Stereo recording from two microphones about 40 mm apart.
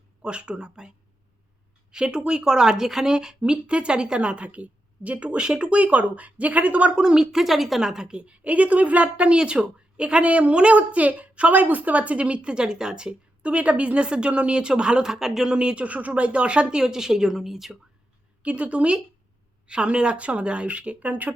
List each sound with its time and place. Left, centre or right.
0.2 s speech: right
1.9 s a woman's voice: right
6.9 s speech: centre
7.4 s speech: centre
7.8 s speech: centre
8.2 s a woman's voice: right
13.4 s speech: right; by 15.5 s centre
15.5 s speech: right; by 17.7 s centre
18.4 s a woman's voice: right